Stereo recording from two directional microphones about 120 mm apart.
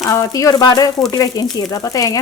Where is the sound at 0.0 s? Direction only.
25° left (ahead or behind).